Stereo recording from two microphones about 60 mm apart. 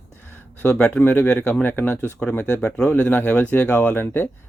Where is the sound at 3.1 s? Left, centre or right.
Left.